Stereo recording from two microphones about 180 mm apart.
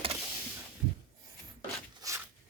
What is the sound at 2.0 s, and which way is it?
Zipper, 15° right (ahead or behind).